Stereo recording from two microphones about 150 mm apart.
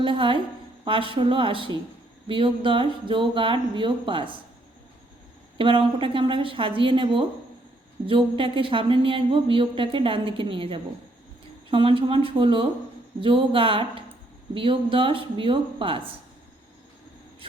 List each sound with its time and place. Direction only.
0.0 s a woman's voice: 35° right (ahead or behind)
5.5 s a woman's voice: 35° right (ahead or behind)